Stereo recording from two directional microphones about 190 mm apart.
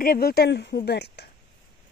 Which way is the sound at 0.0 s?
50° left (ahead or behind).